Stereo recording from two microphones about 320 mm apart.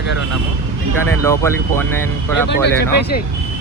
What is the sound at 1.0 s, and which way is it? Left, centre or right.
Speech, centre.